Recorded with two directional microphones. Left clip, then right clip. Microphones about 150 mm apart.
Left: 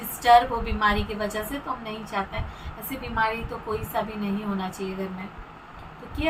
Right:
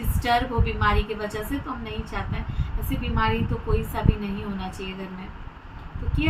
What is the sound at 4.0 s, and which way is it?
Speech, centre (ahead or behind).